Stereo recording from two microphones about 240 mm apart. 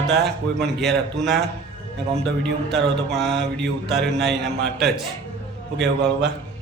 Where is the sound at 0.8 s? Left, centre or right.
Centre.